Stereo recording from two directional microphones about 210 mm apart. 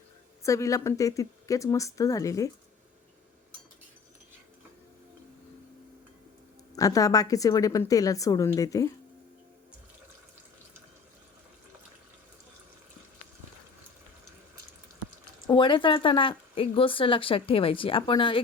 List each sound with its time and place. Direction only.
0.4 s a woman's voice: 15° left (ahead or behind)
6.7 s a woman's voice: 15° left (ahead or behind)
15.4 s speech: 20° left (ahead or behind)